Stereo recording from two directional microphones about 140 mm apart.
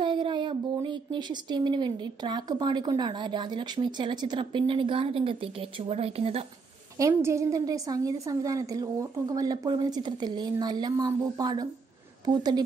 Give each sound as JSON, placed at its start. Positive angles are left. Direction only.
{"t": 0.0, "sound": "speech", "side_deg": -35}
{"t": 7.0, "sound": "a woman's voice", "side_deg": -20}